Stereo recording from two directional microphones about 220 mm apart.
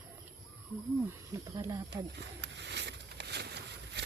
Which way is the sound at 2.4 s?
55° right (ahead or behind).